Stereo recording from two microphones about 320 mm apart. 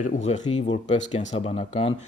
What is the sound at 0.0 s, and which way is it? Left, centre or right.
Speech, left.